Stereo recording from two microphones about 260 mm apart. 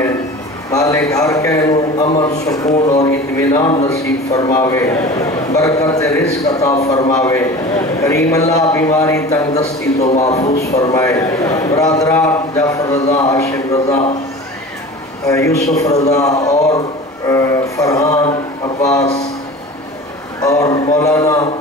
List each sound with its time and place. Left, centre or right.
0.7 s a man's voice: centre
9.6 s a man's voice: left
10.8 s a man's voice: centre
15.2 s a man's voice: centre
20.4 s a man's voice: centre